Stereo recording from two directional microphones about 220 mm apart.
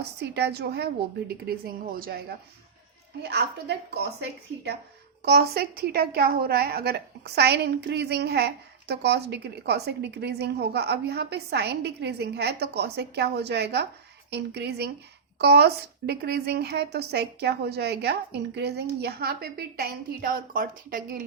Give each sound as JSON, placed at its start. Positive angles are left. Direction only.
{"t": 0.2, "sound": "speech", "side_deg": -50}
{"t": 3.2, "sound": "speech", "side_deg": -50}
{"t": 5.2, "sound": "speech", "side_deg": -45}